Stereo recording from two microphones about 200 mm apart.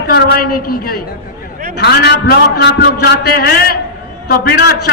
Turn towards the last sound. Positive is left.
turn(degrees=50)  # may be behind; listen again after turning